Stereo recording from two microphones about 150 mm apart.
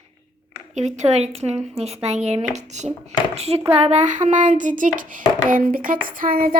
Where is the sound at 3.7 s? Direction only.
45° right (ahead or behind).